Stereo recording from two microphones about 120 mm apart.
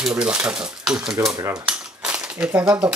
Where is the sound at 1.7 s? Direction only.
10° right (ahead or behind).